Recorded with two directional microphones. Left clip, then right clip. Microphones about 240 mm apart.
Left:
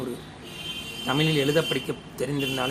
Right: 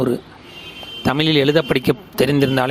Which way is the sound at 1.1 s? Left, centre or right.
Right.